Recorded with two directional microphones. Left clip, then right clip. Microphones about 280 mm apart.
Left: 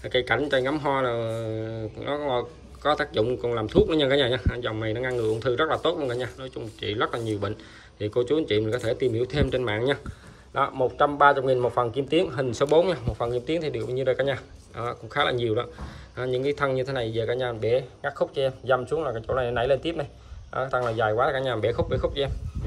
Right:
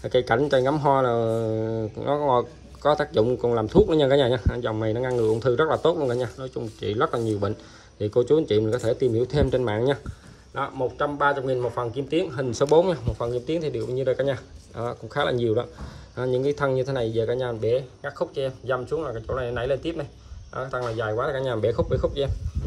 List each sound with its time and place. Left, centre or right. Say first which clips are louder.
0.1 s speech: right 3 dB; centre